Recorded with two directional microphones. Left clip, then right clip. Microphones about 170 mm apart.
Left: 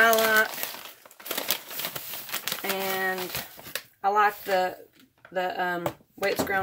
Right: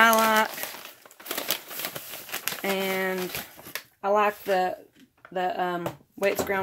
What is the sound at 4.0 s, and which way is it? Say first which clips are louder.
Speech: even; 40° right (ahead or behind).